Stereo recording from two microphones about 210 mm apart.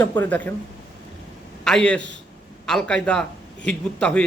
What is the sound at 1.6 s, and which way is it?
A man's voice, 5° left (ahead or behind).